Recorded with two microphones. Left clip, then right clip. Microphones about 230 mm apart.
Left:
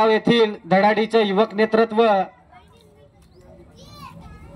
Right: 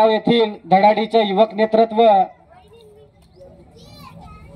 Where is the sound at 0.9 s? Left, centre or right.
Centre.